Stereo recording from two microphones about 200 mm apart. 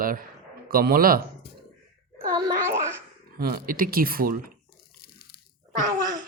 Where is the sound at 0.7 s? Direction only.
45° right (ahead or behind).